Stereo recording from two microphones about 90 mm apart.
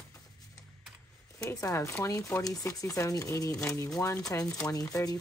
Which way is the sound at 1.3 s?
35° left (ahead or behind).